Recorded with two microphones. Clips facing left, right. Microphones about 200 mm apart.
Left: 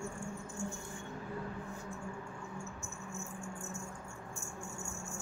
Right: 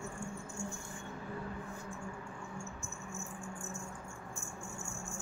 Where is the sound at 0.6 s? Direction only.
35° left (ahead or behind).